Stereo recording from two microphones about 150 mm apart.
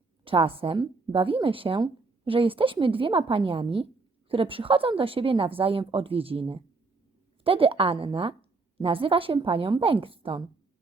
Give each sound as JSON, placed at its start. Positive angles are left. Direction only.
{"t": 0.3, "sound": "speech", "side_deg": -40}